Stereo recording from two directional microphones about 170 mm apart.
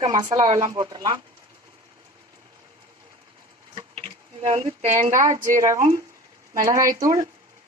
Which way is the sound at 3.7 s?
30° right (ahead or behind).